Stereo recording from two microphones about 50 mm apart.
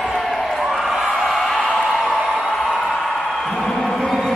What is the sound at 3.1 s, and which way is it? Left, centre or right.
Music, centre.